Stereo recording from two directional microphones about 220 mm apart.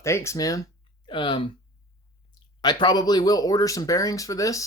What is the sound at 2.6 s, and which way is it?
Speech, 20° left (ahead or behind).